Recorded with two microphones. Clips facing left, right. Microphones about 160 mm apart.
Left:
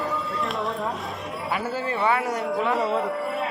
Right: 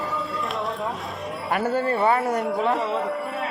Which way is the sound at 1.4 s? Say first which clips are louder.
Right 5 dB; 55° right (ahead or behind).